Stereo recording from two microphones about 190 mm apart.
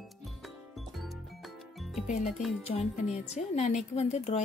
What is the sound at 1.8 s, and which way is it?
Music, centre (ahead or behind).